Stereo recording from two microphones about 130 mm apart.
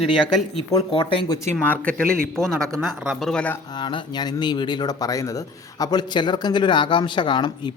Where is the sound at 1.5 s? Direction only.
10° left (ahead or behind).